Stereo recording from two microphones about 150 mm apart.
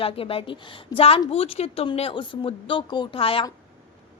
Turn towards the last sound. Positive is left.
turn(degrees=40)  # may be behind; listen again after turning